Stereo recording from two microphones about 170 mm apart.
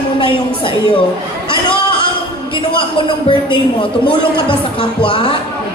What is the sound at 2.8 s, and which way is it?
A man's voice, 30° left (ahead or behind).